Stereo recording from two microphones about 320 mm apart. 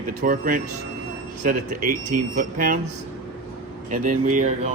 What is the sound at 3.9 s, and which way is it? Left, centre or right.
Speech, right.